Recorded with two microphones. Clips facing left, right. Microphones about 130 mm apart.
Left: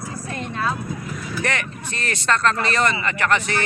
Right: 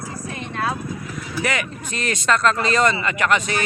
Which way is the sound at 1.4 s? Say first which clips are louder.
Right 2 dB; 15° right (ahead or behind).